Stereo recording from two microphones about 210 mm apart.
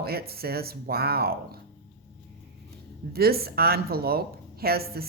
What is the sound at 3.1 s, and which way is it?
A woman's voice, 45° right (ahead or behind).